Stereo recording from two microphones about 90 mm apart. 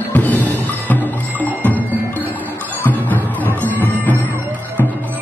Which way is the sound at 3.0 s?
20° left (ahead or behind).